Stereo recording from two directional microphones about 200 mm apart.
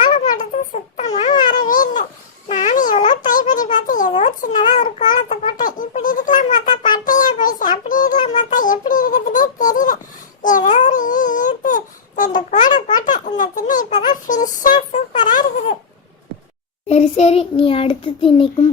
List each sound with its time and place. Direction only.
0.0 s baby cry: 40° left (ahead or behind)
2.5 s a sound: 35° left (ahead or behind)
7.0 s child singing: 40° left (ahead or behind)
7.9 s music: 40° left (ahead or behind)
10.4 s baby cry: 40° left (ahead or behind)
12.7 s baby laughter: 40° left (ahead or behind)
14.3 s a sound: 40° left (ahead or behind)
16.9 s child singing: 35° left (ahead or behind)